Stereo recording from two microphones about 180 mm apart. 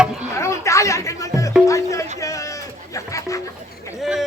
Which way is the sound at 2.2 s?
20° left (ahead or behind).